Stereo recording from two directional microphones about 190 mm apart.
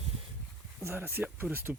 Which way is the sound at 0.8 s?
15° right (ahead or behind).